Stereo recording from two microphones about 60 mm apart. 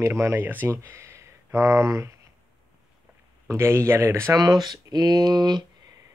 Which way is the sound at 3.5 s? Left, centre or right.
Right.